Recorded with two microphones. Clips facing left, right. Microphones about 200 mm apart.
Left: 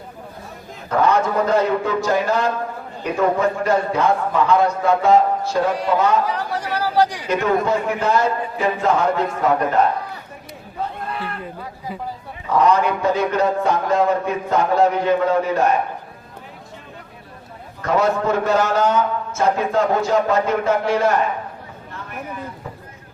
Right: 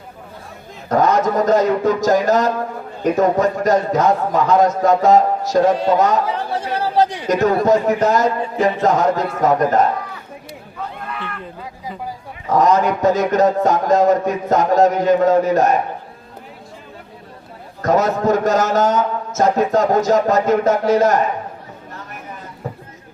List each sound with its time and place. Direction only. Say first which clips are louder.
0.9 s a man's voice: right 2 dB; 40° right (ahead or behind)
5.7 s a man's voice: right 4 dB; 25° right (ahead or behind)
6.2 s chatter: right 2 dB; 25° right (ahead or behind)
7.3 s a man's voice: right 4 dB; 40° right (ahead or behind)
10.8 s run: left 2 dB; 30° left (ahead or behind)
12.5 s a man's voice: right 2 dB; 40° right (ahead or behind)
17.8 s a man's voice: right 3 dB; 40° right (ahead or behind)